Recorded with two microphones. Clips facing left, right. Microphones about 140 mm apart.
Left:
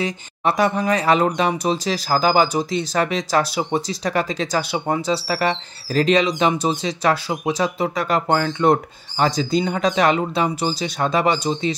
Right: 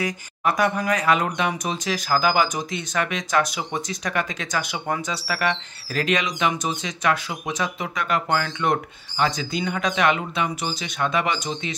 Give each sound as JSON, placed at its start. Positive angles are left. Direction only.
{"t": 0.0, "sound": "speech", "side_deg": 30}